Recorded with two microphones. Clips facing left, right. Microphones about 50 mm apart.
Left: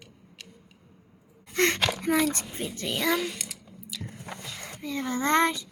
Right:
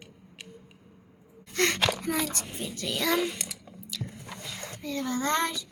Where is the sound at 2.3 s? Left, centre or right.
Left.